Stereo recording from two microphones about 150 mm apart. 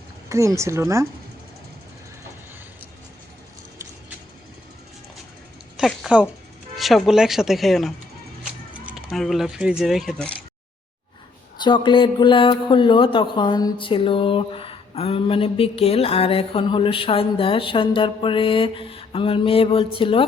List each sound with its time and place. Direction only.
0.3 s speech: 20° right (ahead or behind)
5.7 s speech: 5° right (ahead or behind)
11.5 s speech: 30° left (ahead or behind)